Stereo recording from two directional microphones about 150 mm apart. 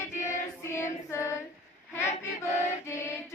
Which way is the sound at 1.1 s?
20° left (ahead or behind).